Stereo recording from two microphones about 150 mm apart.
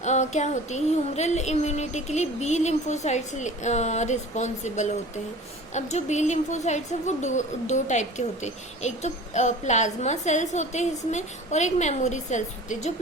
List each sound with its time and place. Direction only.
0.0 s a woman's voice: 50° left (ahead or behind)